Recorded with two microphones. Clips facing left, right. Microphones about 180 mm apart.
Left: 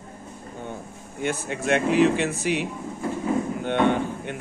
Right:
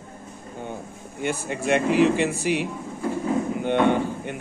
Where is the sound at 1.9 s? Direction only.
55° left (ahead or behind).